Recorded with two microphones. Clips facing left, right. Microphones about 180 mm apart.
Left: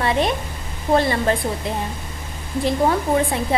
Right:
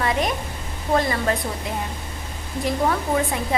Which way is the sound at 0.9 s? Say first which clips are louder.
Left 3 dB; 30° left (ahead or behind).